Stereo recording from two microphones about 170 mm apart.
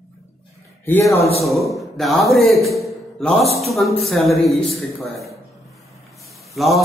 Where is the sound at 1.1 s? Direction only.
35° left (ahead or behind).